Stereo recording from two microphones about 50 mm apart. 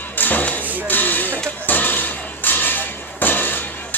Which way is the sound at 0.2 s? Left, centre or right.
Left.